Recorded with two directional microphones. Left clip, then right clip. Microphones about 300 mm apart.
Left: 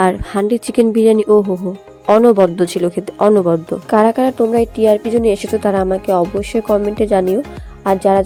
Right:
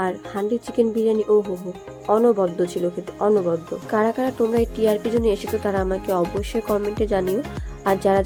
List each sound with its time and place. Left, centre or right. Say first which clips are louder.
0.0 s speech: left 10 dB; left